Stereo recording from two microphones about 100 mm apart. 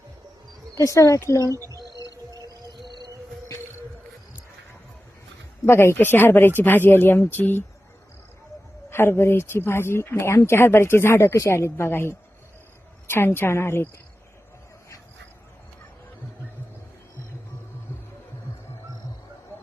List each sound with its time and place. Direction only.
0.8 s speech: 35° left (ahead or behind)
1.5 s a sound: 35° right (ahead or behind)
2.8 s music: 50° right (ahead or behind)
5.6 s speech: 25° left (ahead or behind)
8.9 s speech: 20° left (ahead or behind)